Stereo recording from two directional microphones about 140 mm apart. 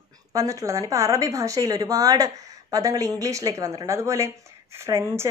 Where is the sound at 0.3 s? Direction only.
25° right (ahead or behind).